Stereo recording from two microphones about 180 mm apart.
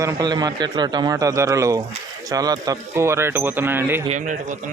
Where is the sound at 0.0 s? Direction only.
20° right (ahead or behind).